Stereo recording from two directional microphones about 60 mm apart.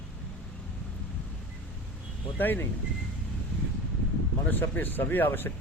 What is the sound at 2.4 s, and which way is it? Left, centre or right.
Speech, left.